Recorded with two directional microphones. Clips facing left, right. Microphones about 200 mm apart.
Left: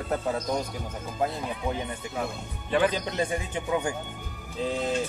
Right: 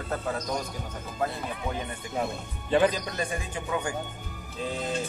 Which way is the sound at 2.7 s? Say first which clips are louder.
Right 2 dB; 25° right (ahead or behind).